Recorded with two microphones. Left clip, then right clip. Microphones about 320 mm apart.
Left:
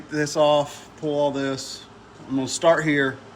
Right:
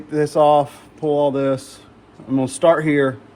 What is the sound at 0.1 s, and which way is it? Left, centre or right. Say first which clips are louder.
Speech: right 5 dB; centre.